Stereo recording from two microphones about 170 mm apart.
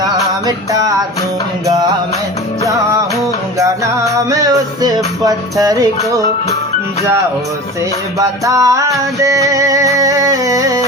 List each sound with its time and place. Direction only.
0.0 s music: 20° right (ahead or behind)
3.6 s music: 20° right (ahead or behind)
8.2 s music: 20° right (ahead or behind)